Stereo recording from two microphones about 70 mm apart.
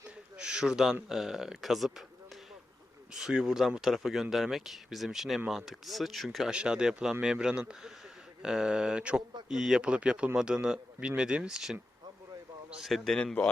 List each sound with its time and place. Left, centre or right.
0.3 s a man's voice: centre
3.1 s speech: centre
6.5 s a man's voice: centre